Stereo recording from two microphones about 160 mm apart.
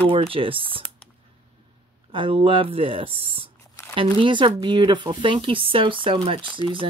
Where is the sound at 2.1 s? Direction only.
35° right (ahead or behind).